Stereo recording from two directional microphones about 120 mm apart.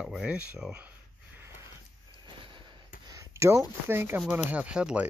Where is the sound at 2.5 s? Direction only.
40° right (ahead or behind).